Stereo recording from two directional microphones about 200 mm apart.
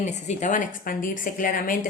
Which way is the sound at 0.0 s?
35° left (ahead or behind).